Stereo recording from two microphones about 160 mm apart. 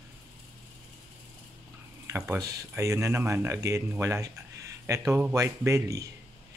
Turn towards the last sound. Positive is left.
turn(degrees=-20)  # may be behind; listen again after turning